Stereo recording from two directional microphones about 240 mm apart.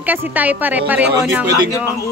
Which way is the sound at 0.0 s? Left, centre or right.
Centre.